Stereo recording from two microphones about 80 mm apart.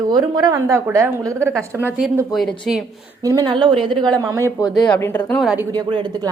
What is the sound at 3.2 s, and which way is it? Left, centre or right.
Speech, right.